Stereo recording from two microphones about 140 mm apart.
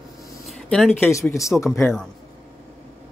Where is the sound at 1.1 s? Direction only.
20° left (ahead or behind).